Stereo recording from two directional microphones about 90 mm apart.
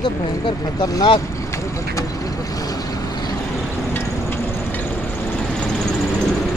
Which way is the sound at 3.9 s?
20° left (ahead or behind).